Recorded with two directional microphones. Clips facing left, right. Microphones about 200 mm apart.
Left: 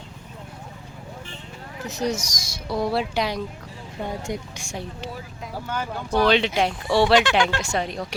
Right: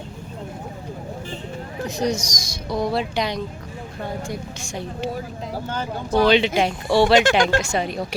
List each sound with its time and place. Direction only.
1.9 s speech: 5° left (ahead or behind)
4.7 s speech: centre (ahead or behind)
5.6 s speech: 25° right (ahead or behind)
6.1 s speech: centre (ahead or behind)
7.2 s speech: 45° right (ahead or behind)
7.6 s speech: centre (ahead or behind)